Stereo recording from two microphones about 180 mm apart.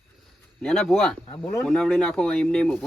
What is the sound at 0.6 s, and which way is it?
Speech, centre (ahead or behind).